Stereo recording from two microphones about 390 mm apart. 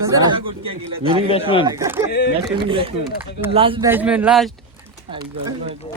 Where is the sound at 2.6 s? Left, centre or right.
Centre.